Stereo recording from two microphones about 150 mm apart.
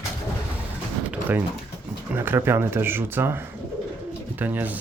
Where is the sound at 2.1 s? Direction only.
15° right (ahead or behind).